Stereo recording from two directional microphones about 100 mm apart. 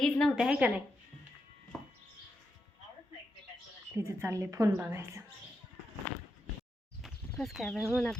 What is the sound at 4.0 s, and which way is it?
A woman's voice, 25° right (ahead or behind).